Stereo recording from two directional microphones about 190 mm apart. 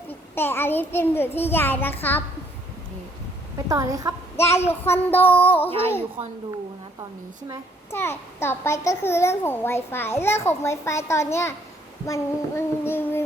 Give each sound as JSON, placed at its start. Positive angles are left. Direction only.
{"t": 0.1, "sound": "a child's voice", "side_deg": 10}
{"t": 3.7, "sound": "a woman's voice", "side_deg": -20}
{"t": 4.4, "sound": "a child's voice", "side_deg": 15}
{"t": 7.9, "sound": "a child's voice", "side_deg": 10}